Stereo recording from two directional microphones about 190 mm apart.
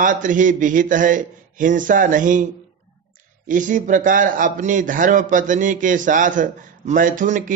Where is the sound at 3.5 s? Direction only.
40° right (ahead or behind).